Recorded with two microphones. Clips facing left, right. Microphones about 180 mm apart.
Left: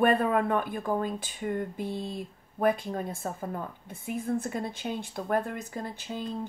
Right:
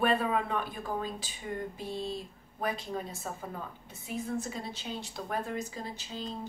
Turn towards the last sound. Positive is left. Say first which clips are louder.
# left 4 dB
turn(degrees=55)  # may be behind; listen again after turning